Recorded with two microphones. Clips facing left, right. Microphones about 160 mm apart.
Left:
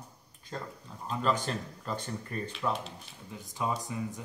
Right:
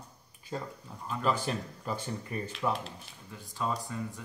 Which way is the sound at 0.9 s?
5° right (ahead or behind).